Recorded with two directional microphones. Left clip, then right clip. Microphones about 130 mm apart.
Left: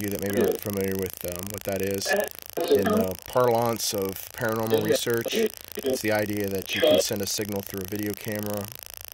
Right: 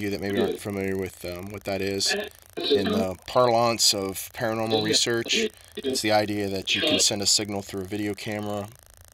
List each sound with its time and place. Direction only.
0.0 s speech: 20° left (ahead or behind)
2.5 s speech: 25° left (ahead or behind)